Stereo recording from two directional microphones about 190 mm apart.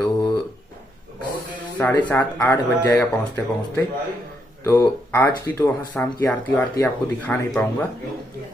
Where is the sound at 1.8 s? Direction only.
10° left (ahead or behind).